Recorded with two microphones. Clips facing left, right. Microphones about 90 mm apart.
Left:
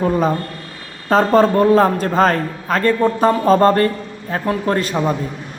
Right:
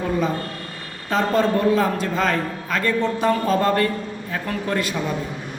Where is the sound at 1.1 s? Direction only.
45° left (ahead or behind).